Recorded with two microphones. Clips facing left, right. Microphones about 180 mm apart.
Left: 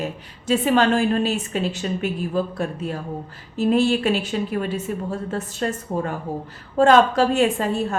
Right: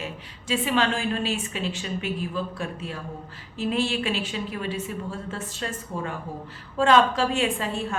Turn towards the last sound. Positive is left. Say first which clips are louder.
# left 6 dB
turn(degrees=40)  # may be behind; listen again after turning